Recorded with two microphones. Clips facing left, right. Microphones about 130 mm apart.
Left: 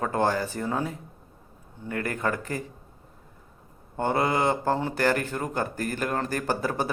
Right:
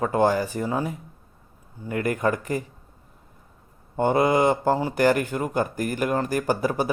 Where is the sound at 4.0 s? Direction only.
15° right (ahead or behind).